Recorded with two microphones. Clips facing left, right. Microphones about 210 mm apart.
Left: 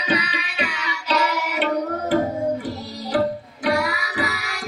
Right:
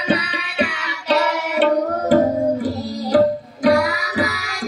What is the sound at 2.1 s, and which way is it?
Music, 40° right (ahead or behind).